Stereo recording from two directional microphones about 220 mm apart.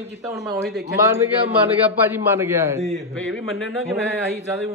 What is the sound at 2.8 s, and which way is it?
A man's voice, centre (ahead or behind).